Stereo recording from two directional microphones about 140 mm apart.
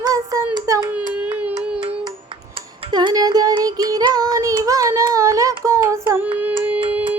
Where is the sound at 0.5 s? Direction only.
25° right (ahead or behind).